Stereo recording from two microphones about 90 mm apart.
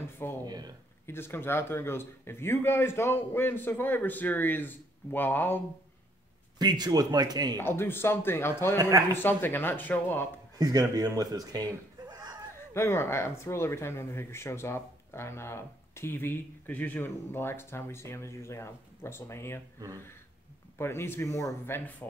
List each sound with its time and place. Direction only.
0.0 s a sound: 25° left (ahead or behind)
0.5 s a man's voice: 50° right (ahead or behind)
1.0 s speech: 25° left (ahead or behind)
6.6 s a man's voice: 50° right (ahead or behind)
7.5 s speech: 25° left (ahead or behind)
8.7 s speech: 40° right (ahead or behind)
9.2 s speech: 25° left (ahead or behind)
10.6 s a man's voice: 45° right (ahead or behind)
12.1 s chuckle: 50° right (ahead or behind)
12.7 s speech: 30° left (ahead or behind)
20.7 s speech: 25° left (ahead or behind)